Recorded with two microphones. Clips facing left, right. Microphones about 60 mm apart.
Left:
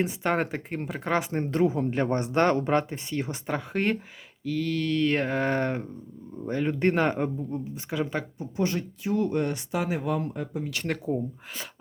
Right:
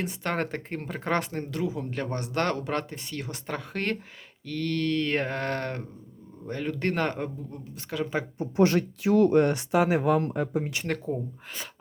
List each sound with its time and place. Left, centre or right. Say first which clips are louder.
0.0 s speech: left 4 dB; centre
0.9 s mantra: left 1 dB; centre
1.5 s a man's voice: left 6 dB; left; by 3.9 s centre
4.4 s mantra: left 1 dB; centre
6.5 s speech: left 4 dB; centre
8.4 s speech: right 8 dB; right
10.8 s mantra: left 2 dB; centre